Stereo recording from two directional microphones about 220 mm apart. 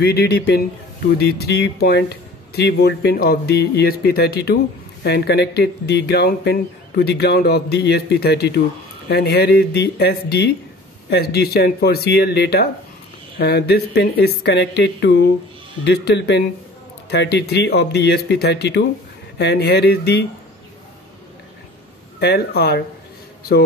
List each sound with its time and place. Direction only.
0.0 s speech: 45° left (ahead or behind)
22.2 s speech: 45° left (ahead or behind)